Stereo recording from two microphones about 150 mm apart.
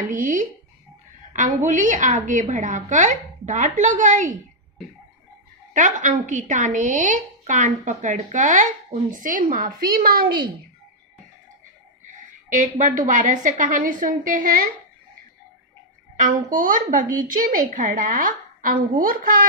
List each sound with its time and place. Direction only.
0.1 s a woman's voice: 60° right (ahead or behind)
5.7 s a woman's voice: 60° right (ahead or behind)
9.5 s a woman's voice: 70° right (ahead or behind)
12.4 s a woman's voice: 55° right (ahead or behind)
16.2 s a woman's voice: 60° right (ahead or behind)